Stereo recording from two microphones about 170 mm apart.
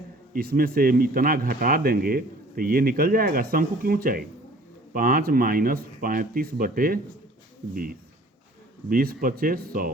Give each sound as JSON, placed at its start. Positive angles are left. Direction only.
{"t": 0.3, "sound": "speech", "side_deg": -60}
{"t": 8.9, "sound": "speech", "side_deg": -60}